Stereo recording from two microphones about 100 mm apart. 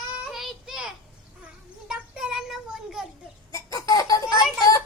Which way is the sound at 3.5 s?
35° left (ahead or behind).